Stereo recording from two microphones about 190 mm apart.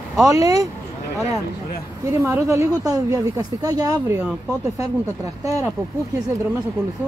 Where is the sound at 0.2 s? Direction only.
20° right (ahead or behind).